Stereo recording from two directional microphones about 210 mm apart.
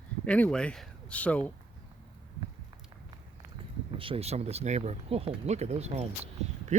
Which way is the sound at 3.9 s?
25° right (ahead or behind).